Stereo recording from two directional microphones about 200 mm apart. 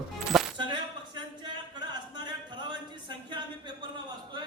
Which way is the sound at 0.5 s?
20° right (ahead or behind).